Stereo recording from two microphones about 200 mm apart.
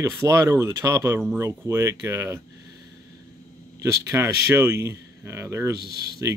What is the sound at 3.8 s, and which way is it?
Speech, 15° right (ahead or behind).